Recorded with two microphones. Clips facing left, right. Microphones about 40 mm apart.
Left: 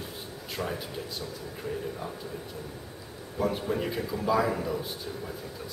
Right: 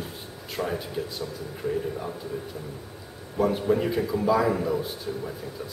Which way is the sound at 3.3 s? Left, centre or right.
Centre.